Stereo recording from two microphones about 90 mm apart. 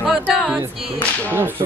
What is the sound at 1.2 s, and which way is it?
Whip, 25° right (ahead or behind).